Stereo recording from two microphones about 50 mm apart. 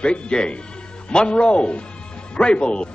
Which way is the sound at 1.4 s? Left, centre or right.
Left.